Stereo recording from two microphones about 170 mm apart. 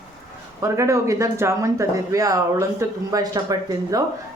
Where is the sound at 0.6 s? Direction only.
20° right (ahead or behind).